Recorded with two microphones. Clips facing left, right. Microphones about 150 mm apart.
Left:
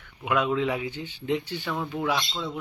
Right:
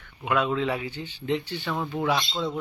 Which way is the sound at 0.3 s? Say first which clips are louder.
Even; 10° left (ahead or behind).